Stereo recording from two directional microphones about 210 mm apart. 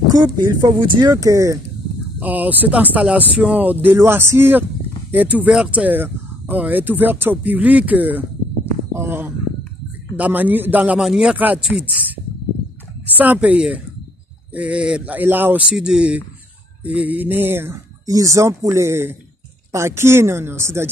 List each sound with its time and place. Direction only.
0.1 s speech: 20° right (ahead or behind)
8.9 s a sound: 10° right (ahead or behind)
10.1 s speech: 10° right (ahead or behind)
13.2 s speech: 5° right (ahead or behind)